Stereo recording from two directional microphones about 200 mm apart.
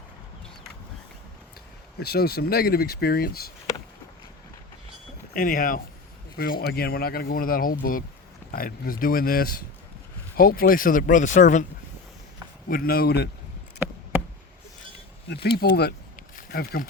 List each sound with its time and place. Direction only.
2.0 s speech: 50° left (ahead or behind)
5.3 s speech: 45° left (ahead or behind)
12.6 s speech: 45° left (ahead or behind)
13.8 s a sound: 10° right (ahead or behind)
15.3 s speech: 55° left (ahead or behind)